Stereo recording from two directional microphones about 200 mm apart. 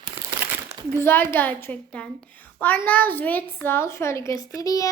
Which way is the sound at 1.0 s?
10° left (ahead or behind).